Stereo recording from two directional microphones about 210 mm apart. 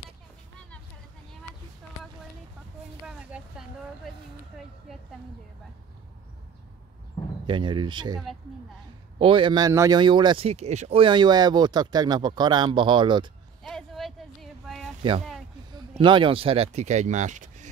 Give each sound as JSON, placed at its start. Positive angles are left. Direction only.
{"t": 3.1, "sound": "speech", "side_deg": -5}
{"t": 7.4, "sound": "speech", "side_deg": -20}
{"t": 9.2, "sound": "speech", "side_deg": -25}
{"t": 13.7, "sound": "a sound", "side_deg": 0}
{"t": 15.7, "sound": "speech", "side_deg": -20}